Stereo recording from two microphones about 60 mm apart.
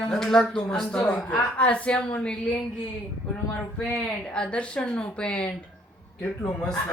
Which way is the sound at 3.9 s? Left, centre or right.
Centre.